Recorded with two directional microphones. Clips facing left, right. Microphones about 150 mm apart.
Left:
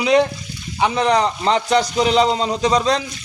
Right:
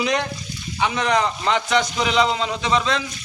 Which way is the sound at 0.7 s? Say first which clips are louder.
Left 4 dB; 35° left (ahead or behind).